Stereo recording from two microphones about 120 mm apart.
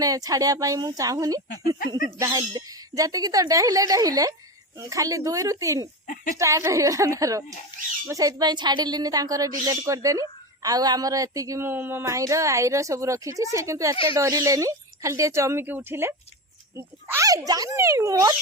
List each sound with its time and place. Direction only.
0.0 s speech: 30° right (ahead or behind)